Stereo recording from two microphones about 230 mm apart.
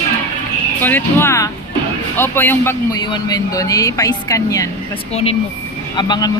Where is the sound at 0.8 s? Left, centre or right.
Centre.